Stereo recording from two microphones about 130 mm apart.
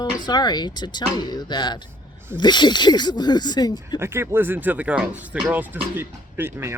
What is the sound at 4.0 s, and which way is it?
Speech, 20° right (ahead or behind).